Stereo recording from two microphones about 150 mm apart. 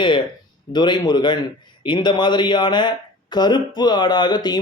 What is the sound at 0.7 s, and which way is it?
Speech, 30° left (ahead or behind).